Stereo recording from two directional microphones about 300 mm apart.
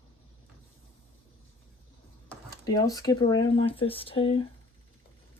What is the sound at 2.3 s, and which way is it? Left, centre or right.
Speech, centre.